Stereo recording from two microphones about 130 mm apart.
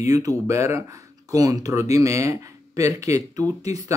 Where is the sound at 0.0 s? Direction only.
25° right (ahead or behind).